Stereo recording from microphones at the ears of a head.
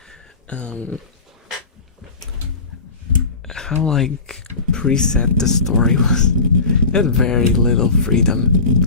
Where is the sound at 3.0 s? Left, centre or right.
Left.